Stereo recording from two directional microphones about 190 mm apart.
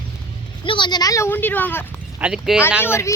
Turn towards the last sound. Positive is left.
turn(degrees=15)  # may be behind; listen again after turning